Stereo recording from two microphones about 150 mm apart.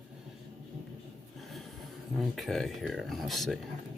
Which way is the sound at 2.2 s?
Centre (ahead or behind).